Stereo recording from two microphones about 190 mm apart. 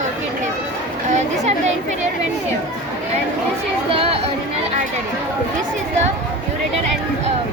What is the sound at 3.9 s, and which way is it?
Chatter, 30° right (ahead or behind).